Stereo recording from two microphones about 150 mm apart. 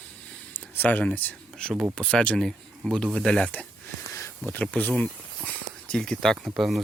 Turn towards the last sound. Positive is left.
turn(degrees=0)  # may be behind; listen again after turning